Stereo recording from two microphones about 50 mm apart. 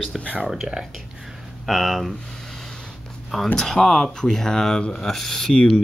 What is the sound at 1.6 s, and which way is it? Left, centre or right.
Speech, centre.